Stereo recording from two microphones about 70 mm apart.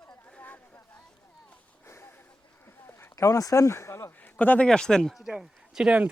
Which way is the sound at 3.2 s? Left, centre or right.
Left.